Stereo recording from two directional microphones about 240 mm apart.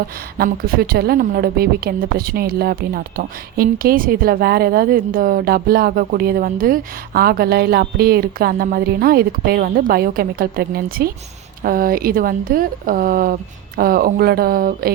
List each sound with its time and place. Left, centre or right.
0.3 s a woman's voice: right